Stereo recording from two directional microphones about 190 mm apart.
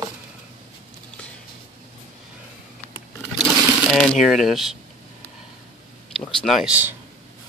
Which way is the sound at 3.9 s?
Centre (ahead or behind).